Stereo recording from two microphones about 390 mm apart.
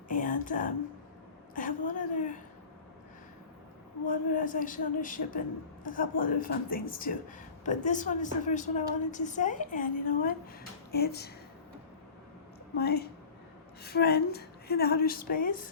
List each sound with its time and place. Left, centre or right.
0.1 s a woman's voice: centre
4.0 s a woman's voice: left
12.7 s a woman's voice: left